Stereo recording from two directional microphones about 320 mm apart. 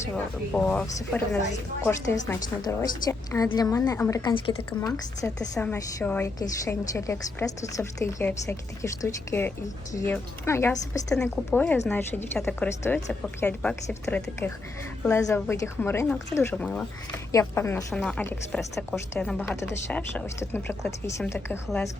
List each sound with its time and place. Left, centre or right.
0.1 s a woman's voice: centre
1.4 s a woman's voice: left
1.8 s a woman's voice: centre